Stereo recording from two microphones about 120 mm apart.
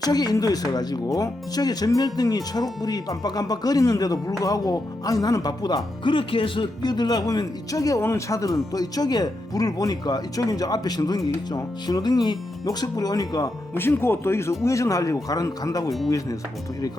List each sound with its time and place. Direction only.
0.0 s speech: 30° left (ahead or behind)
13.7 s speech: 20° left (ahead or behind)